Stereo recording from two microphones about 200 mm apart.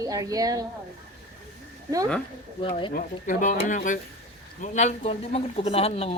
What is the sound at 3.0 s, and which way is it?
Speech, 40° left (ahead or behind).